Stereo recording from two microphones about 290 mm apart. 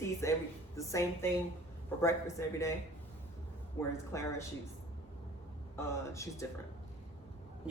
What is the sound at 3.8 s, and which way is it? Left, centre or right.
Speech, centre.